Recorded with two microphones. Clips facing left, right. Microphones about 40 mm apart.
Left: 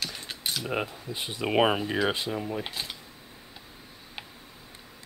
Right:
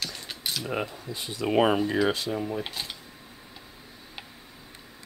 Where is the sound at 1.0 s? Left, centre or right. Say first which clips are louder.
Right 1 dB; left; by 2.1 s centre.